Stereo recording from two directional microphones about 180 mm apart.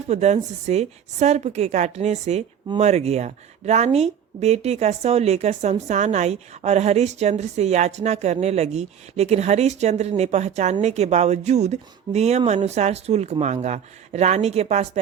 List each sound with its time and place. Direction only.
0.1 s a woman's voice: 40° right (ahead or behind)